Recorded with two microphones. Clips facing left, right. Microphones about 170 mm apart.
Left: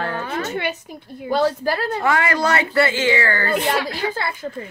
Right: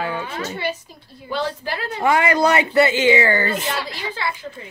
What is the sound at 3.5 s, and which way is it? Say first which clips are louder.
Speech: left 4 dB; 50° left (ahead or behind).